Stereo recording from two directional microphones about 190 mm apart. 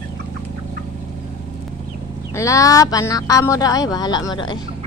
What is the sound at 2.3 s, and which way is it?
Speech, 15° left (ahead or behind).